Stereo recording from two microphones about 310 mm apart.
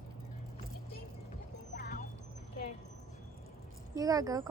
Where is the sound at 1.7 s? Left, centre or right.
Left.